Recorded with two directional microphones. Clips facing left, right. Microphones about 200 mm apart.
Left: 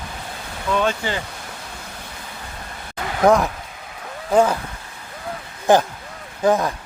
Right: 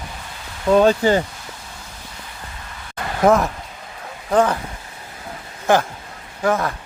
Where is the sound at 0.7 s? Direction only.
40° right (ahead or behind).